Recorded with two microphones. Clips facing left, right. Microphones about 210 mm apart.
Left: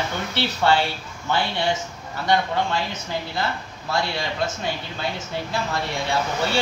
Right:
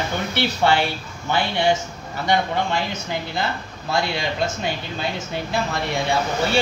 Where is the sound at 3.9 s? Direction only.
15° right (ahead or behind).